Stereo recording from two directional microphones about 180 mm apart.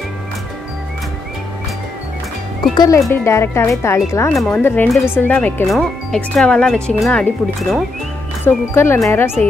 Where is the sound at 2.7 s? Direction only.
20° left (ahead or behind).